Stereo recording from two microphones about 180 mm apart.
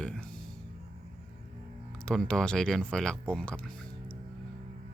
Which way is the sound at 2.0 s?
5° left (ahead or behind).